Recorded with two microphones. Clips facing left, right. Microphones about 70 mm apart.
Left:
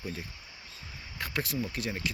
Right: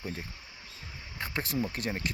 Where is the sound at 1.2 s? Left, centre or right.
Right.